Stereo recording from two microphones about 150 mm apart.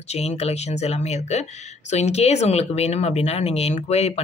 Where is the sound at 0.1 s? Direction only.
45° left (ahead or behind).